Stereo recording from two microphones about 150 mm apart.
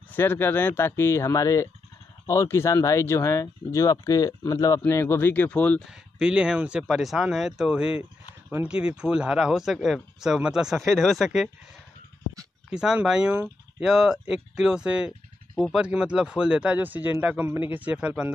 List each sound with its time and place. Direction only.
0.1 s speech: 15° left (ahead or behind)
6.1 s speech: 5° right (ahead or behind)
12.6 s speech: 5° right (ahead or behind)